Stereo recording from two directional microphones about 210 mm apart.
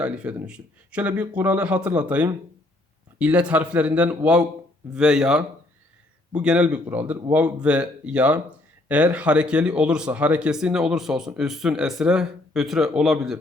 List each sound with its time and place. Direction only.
0.0 s speech: 5° right (ahead or behind)